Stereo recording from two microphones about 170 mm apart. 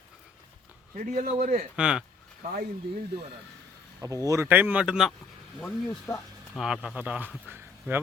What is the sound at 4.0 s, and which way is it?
A man's voice, 20° right (ahead or behind).